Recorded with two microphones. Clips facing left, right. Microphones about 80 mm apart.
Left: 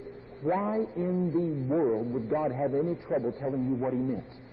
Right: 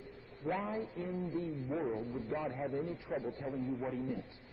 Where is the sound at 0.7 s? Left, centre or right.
Left.